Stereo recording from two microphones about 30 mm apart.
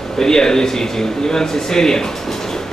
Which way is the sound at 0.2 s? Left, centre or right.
Left.